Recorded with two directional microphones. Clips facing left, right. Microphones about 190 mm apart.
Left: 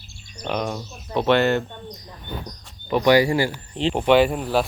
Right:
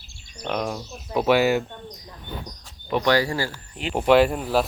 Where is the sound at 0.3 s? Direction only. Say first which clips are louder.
Left 1 dB; centre (ahead or behind).